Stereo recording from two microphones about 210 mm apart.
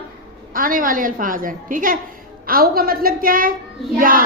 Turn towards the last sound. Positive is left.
turn(degrees=-40)  # may be behind; listen again after turning